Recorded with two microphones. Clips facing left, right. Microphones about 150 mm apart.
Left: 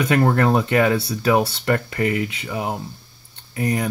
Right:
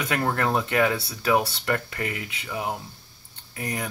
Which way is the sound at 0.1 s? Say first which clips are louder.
Left 6 dB; 30° left (ahead or behind).